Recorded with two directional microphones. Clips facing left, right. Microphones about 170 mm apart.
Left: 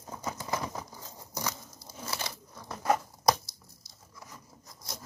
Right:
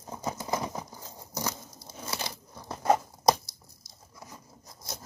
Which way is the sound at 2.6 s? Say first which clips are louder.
Right 3 dB; 25° right (ahead or behind).